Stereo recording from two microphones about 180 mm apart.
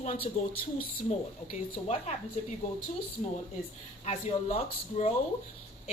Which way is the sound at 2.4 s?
40° left (ahead or behind).